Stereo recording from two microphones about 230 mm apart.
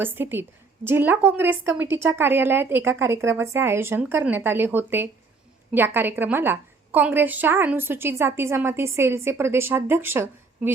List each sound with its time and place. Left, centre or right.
0.0 s a woman's voice: centre